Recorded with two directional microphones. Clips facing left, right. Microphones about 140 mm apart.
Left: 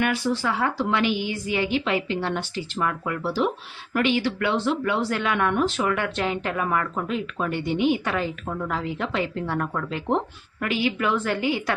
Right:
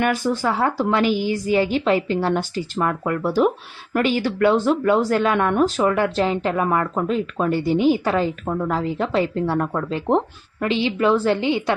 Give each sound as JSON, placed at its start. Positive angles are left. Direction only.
{"t": 0.0, "sound": "a woman's voice", "side_deg": -45}